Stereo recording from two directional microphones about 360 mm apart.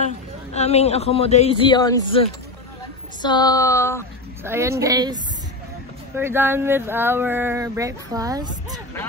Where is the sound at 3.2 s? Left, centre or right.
Centre.